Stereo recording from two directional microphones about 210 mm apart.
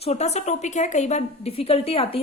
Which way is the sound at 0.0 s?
30° left (ahead or behind).